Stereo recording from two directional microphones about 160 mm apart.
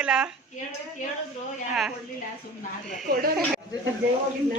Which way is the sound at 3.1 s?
65° right (ahead or behind).